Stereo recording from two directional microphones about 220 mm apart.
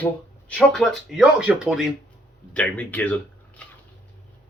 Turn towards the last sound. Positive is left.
turn(degrees=5)  # may be behind; listen again after turning